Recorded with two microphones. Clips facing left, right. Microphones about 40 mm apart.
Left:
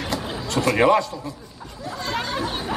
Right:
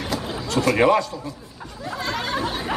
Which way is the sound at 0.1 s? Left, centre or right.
Centre.